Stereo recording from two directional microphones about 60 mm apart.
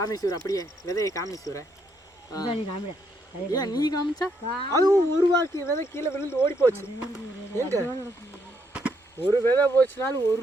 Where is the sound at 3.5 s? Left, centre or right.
Left.